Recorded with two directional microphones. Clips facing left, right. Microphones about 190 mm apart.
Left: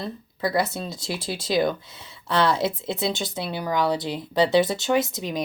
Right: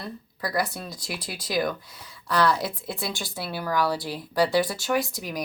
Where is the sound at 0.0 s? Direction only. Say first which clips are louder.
Left 6 dB; 25° left (ahead or behind).